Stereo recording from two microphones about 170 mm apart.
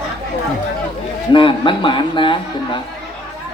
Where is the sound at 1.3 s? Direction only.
30° left (ahead or behind).